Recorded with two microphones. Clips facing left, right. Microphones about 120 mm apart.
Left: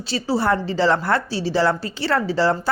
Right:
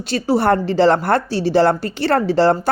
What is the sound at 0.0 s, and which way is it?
A woman's voice, 55° right (ahead or behind).